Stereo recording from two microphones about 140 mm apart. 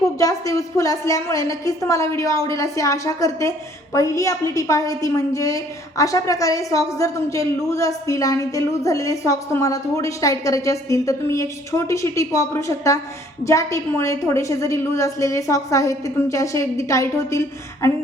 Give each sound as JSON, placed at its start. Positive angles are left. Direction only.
{"t": 0.2, "sound": "a woman's voice", "side_deg": 25}